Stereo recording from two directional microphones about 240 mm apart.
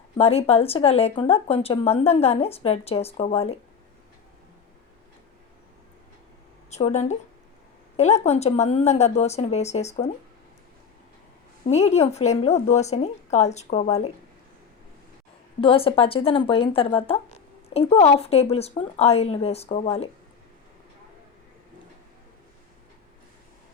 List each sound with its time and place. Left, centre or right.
0.2 s speech: left
6.7 s speech: left
11.6 s speech: left
15.6 s speech: left